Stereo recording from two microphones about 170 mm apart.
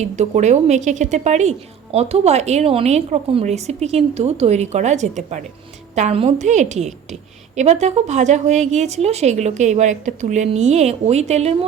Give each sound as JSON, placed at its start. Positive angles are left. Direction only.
{"t": 0.0, "sound": "a woman's voice", "side_deg": -40}